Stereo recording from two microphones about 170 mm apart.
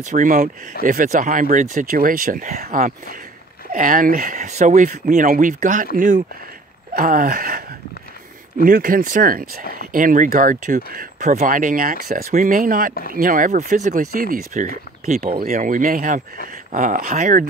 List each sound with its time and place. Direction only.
0.0 s speech: 50° right (ahead or behind)